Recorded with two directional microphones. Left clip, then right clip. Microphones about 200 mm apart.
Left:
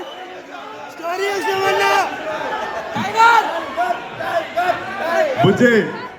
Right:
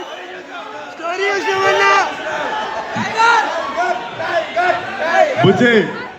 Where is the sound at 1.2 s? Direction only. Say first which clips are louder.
Right 3 dB; 10° left (ahead or behind).